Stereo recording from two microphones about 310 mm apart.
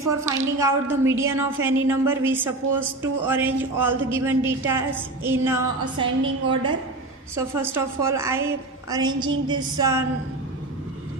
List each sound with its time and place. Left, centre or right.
0.0 s a woman's voice: centre